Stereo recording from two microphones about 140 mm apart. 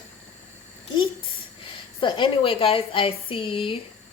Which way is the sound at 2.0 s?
35° left (ahead or behind).